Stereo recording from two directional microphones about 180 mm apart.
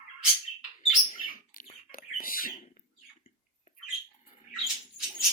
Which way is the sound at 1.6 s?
50° left (ahead or behind).